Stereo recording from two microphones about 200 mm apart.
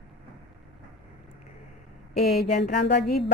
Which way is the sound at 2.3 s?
50° left (ahead or behind).